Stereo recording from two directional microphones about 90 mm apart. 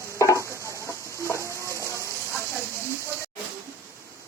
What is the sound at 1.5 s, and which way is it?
Stir, 30° right (ahead or behind).